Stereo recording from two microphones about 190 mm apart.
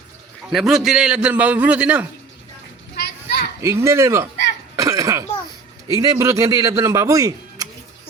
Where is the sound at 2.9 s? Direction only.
55° left (ahead or behind).